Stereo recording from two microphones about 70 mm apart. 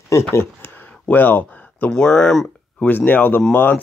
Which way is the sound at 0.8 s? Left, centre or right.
Left.